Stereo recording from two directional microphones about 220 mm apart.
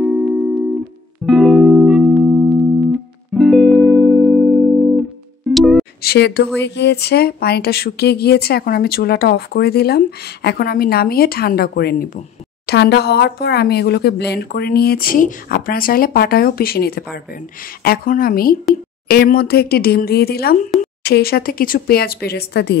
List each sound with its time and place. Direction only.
0.0 s music: centre (ahead or behind)
6.0 s speech: 50° left (ahead or behind)